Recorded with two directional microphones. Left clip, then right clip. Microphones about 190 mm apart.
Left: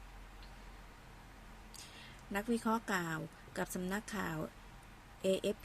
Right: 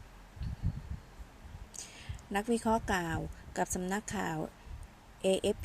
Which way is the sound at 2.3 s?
20° right (ahead or behind).